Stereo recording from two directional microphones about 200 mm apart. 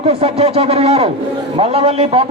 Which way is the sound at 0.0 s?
30° right (ahead or behind).